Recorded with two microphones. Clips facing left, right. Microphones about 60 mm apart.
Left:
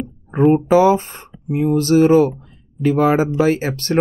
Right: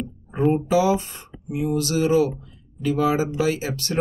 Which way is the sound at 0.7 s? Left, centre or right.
Left.